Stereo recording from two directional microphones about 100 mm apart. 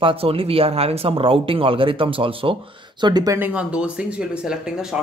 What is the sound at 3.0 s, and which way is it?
Speech, 40° right (ahead or behind).